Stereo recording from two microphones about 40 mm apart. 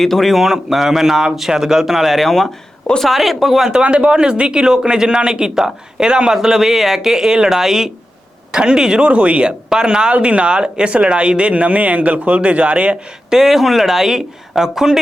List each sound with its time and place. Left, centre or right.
0.0 s speech: centre
2.2 s speech: centre
3.8 s speech: right
6.3 s speech: centre
8.5 s speech: right
9.0 s speech: right
13.3 s speech: centre